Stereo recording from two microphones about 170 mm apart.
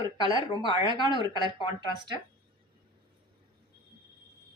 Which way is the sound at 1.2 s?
25° right (ahead or behind).